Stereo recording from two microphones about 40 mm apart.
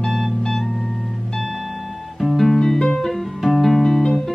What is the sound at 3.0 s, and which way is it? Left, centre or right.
Music, centre.